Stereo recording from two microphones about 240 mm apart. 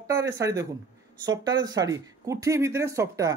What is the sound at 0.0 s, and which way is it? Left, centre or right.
Speech, centre.